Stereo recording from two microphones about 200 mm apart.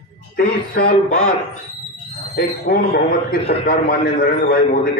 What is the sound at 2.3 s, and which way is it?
A man's voice, 50° left (ahead or behind).